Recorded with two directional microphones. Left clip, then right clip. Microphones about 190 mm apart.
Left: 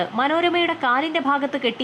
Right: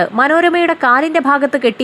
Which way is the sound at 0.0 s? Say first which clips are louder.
Right 9 dB; 25° right (ahead or behind).